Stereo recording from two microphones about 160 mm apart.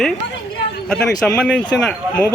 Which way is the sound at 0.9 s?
5° left (ahead or behind).